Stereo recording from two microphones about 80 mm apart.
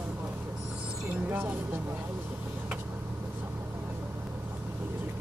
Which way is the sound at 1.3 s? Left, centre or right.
Right.